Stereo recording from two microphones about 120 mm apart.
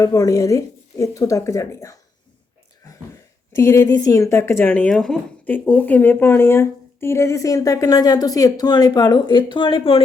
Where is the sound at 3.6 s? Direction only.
20° left (ahead or behind).